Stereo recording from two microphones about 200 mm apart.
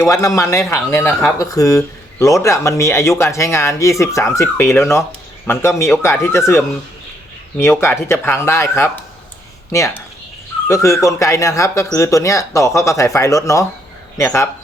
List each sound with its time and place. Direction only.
0.0 s speech: 15° left (ahead or behind)
10.7 s speech: 15° left (ahead or behind)